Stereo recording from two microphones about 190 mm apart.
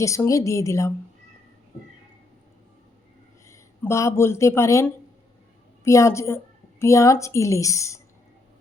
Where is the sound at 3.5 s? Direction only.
15° left (ahead or behind).